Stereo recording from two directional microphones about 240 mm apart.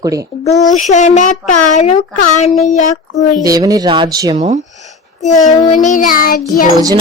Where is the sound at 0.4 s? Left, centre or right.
Left.